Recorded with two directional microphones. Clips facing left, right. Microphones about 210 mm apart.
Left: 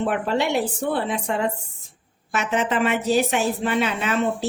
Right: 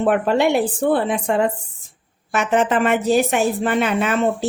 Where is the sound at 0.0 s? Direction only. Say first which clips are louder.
Right 6 dB; 55° right (ahead or behind).